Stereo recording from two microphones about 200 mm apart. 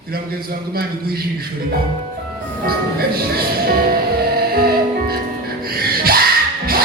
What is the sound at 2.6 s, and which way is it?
Speech, 50° right (ahead or behind).